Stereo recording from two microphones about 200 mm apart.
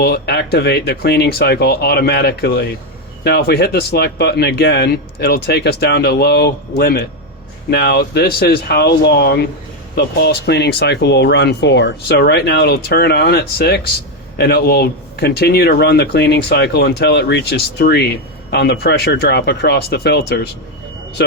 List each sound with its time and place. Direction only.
0.0 s speech: 55° left (ahead or behind)